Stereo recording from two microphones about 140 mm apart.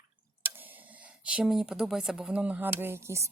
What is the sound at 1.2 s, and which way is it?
Speech, 10° right (ahead or behind).